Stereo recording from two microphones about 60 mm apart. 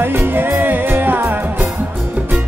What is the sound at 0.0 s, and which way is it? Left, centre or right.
Music, right.